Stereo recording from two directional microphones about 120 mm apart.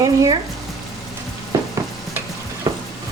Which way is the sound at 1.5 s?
25° right (ahead or behind).